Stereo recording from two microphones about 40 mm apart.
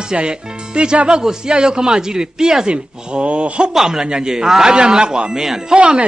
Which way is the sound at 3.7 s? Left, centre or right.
Centre.